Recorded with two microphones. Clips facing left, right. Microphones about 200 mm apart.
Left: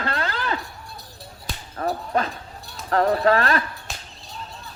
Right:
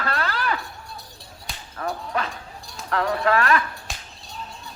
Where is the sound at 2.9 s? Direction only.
40° left (ahead or behind).